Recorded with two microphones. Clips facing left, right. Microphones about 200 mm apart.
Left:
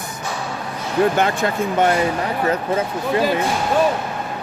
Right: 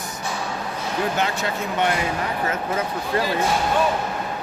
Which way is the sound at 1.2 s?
50° left (ahead or behind).